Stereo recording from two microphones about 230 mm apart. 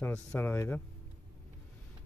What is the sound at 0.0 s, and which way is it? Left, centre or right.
Speech, centre.